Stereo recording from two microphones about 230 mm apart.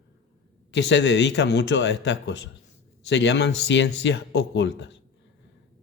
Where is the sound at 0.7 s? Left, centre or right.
Left.